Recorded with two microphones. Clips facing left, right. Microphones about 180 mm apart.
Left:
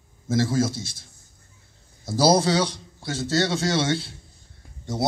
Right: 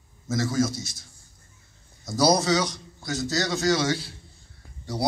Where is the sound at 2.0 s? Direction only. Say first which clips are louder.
Left 2 dB; 30° left (ahead or behind).